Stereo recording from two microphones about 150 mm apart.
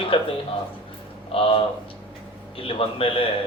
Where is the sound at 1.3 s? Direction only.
40° left (ahead or behind).